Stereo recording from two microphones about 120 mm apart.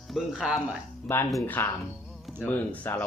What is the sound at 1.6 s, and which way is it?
Speech, 20° left (ahead or behind).